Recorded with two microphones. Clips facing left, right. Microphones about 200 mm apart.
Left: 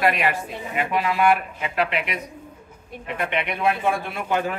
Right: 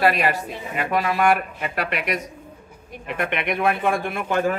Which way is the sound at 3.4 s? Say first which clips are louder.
Right 2 dB; 50° right (ahead or behind).